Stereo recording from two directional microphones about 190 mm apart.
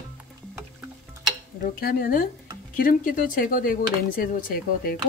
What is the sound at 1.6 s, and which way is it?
Speech, 50° left (ahead or behind).